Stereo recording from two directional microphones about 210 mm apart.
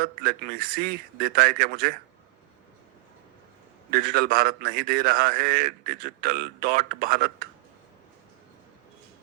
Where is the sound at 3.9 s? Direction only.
45° right (ahead or behind).